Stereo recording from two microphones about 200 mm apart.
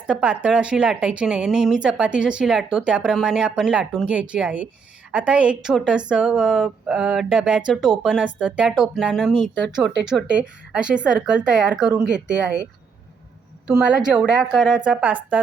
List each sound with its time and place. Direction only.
0.1 s a woman's voice: 5° right (ahead or behind)
13.7 s a woman's voice: 5° right (ahead or behind)